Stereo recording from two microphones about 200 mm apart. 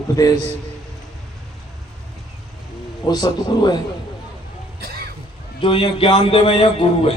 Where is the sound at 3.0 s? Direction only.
20° left (ahead or behind).